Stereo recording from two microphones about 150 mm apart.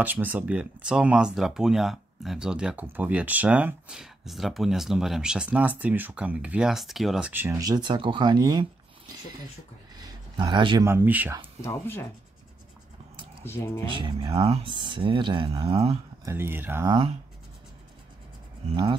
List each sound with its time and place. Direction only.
0.0 s speech: 10° right (ahead or behind); by 8.6 s 25° right (ahead or behind)
9.9 s a sound: 30° right (ahead or behind)
10.9 s speech: 15° right (ahead or behind)
11.6 s speech: 15° left (ahead or behind)
13.4 s speech: 15° left (ahead or behind)
13.9 s speech: 35° right (ahead or behind)
16.3 s speech: 15° right (ahead or behind)
16.8 s speech: 30° right (ahead or behind)